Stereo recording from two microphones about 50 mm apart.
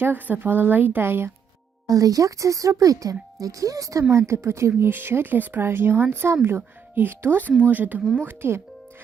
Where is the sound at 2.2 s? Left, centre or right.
Right.